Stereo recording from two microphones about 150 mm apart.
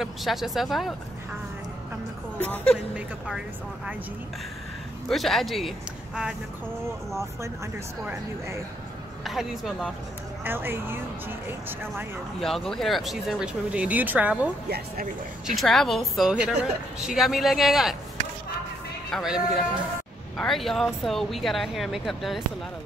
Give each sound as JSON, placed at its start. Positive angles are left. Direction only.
{"t": 0.0, "sound": "speech", "side_deg": 0}
{"t": 2.4, "sound": "speech", "side_deg": 10}
{"t": 5.0, "sound": "speech", "side_deg": 0}
{"t": 7.2, "sound": "speech", "side_deg": -20}
{"t": 9.2, "sound": "speech", "side_deg": 0}
{"t": 10.4, "sound": "speech", "side_deg": -15}
{"t": 12.4, "sound": "speech", "side_deg": 0}
{"t": 15.4, "sound": "speech", "side_deg": 0}
{"t": 19.0, "sound": "speech", "side_deg": 0}